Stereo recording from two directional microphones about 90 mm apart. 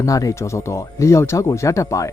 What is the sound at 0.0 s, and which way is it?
Speech, 40° left (ahead or behind).